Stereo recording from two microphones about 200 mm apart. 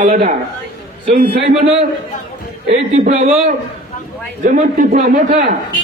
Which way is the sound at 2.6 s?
35° right (ahead or behind).